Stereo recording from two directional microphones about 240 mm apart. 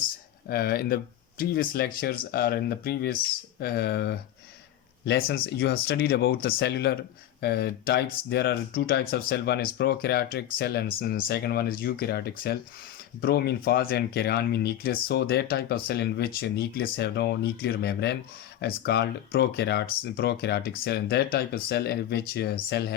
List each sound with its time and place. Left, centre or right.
0.4 s speech: left